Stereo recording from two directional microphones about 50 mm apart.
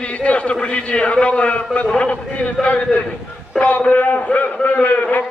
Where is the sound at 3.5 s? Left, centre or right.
Left.